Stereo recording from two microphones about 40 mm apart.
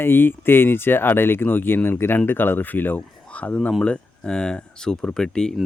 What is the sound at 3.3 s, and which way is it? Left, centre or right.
Speech, left.